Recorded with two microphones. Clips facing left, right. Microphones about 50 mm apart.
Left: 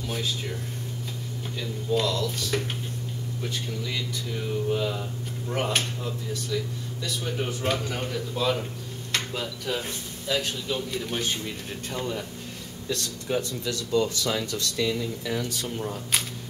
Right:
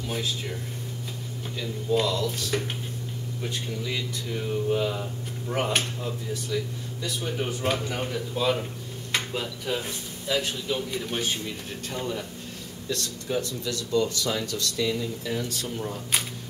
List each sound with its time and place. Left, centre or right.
0.1 s speech: centre
1.6 s speech: centre
13.4 s speech: left
14.9 s speech: centre